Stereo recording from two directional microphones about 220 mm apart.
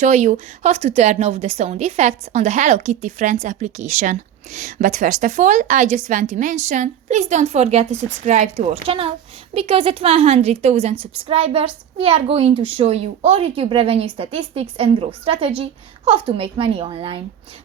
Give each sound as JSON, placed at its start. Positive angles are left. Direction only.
{"t": 0.0, "sound": "a woman's voice", "side_deg": -35}